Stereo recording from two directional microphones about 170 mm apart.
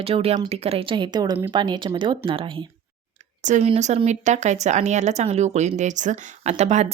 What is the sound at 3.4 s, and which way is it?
A woman's voice, 45° right (ahead or behind).